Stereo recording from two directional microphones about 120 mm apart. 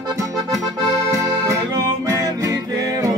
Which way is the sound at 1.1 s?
25° right (ahead or behind).